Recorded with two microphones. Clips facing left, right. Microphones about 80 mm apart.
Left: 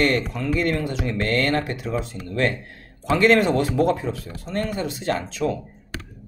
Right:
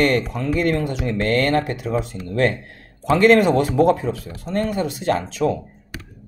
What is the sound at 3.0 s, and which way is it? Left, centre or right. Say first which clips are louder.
Speech: right 3 dB; right.